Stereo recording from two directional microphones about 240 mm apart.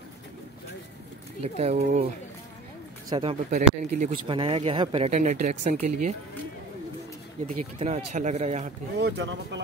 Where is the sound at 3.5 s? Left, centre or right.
Right.